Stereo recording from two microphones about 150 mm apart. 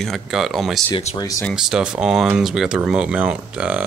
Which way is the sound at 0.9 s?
30° left (ahead or behind).